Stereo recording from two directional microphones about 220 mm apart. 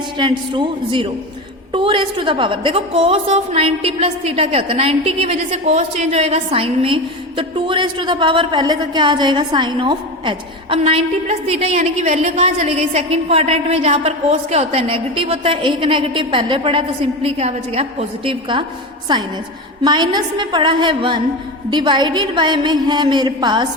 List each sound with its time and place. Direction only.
0.2 s a woman's voice: 20° right (ahead or behind)